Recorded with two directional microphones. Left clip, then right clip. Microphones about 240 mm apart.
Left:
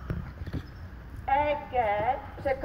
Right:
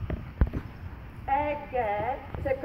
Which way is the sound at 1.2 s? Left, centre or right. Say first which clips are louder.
Left 2 dB; centre.